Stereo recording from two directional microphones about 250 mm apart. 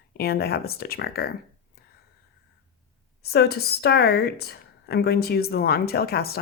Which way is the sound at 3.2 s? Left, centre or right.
Left.